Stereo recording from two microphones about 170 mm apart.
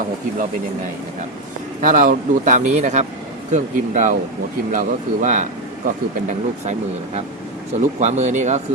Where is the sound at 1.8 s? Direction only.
50° right (ahead or behind).